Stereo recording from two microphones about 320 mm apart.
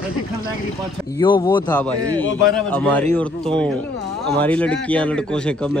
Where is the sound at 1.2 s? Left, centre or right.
Centre.